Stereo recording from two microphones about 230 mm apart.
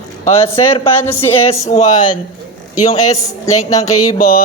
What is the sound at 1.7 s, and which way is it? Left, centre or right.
A woman's voice, left.